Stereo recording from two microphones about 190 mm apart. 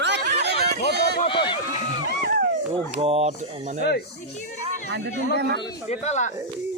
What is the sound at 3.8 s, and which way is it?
Speech, 60° left (ahead or behind).